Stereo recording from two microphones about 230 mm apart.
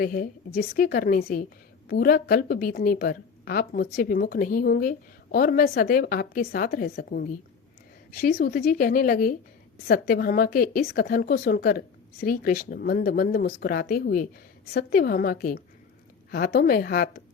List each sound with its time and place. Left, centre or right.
0.0 s speech: left